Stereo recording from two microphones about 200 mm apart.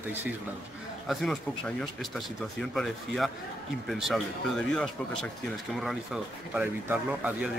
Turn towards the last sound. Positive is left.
turn(degrees=-5)  # may be behind; listen again after turning